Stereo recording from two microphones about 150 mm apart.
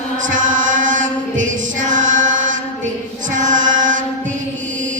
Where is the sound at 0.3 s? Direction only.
60° right (ahead or behind).